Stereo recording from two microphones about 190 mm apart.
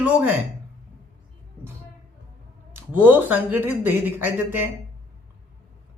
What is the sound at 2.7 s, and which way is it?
A woman's voice, 10° right (ahead or behind).